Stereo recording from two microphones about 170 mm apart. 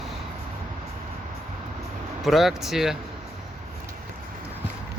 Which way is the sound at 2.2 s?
Centre (ahead or behind).